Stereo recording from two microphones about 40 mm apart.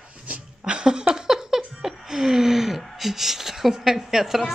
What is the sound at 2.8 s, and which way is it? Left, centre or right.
A woman's voice, centre.